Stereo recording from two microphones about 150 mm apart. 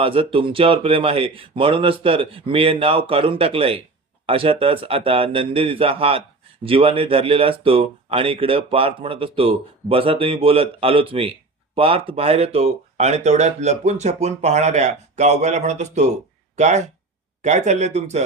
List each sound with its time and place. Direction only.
0.0 s speech: 35° right (ahead or behind)